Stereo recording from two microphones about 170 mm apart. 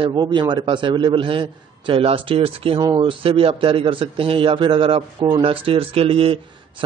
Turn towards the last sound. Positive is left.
turn(degrees=-35)  # may be behind; listen again after turning